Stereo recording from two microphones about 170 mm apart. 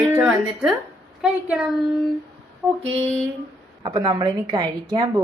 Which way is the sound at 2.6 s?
15° right (ahead or behind).